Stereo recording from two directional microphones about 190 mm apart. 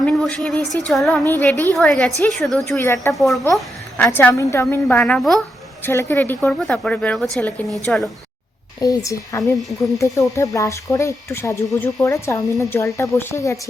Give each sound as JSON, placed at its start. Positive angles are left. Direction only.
{"t": 0.0, "sound": "a sound", "side_deg": 5}
{"t": 1.3, "sound": "a woman's voice", "side_deg": 10}
{"t": 2.8, "sound": "speech", "side_deg": 15}
{"t": 3.2, "sound": "a woman's voice", "side_deg": 0}
{"t": 5.8, "sound": "a woman's voice", "side_deg": 15}
{"t": 8.8, "sound": "speech", "side_deg": 20}
{"t": 9.4, "sound": "a woman's voice", "side_deg": 0}
{"t": 10.3, "sound": "speech", "side_deg": 15}